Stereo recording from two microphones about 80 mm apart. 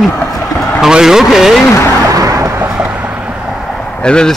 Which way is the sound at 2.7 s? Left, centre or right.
Centre.